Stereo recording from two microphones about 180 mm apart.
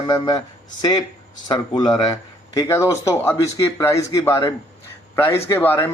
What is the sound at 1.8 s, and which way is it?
Speech, 20° left (ahead or behind).